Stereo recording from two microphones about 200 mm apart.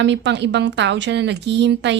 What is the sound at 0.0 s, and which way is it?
A woman's voice, 65° right (ahead or behind).